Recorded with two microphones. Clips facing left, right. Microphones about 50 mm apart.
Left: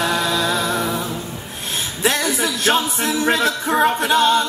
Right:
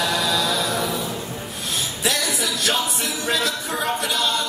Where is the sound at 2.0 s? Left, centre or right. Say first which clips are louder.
Left 6 dB; left.